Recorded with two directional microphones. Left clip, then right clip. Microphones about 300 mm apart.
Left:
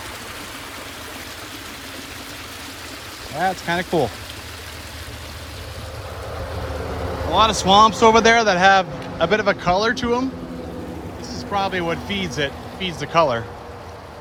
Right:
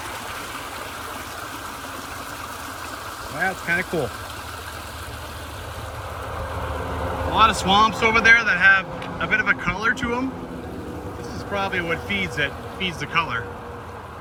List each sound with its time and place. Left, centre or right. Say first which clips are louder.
3.4 s speech: left 1 dB; left
7.3 s speech: left 3 dB; centre
11.5 s speech: left 2 dB; centre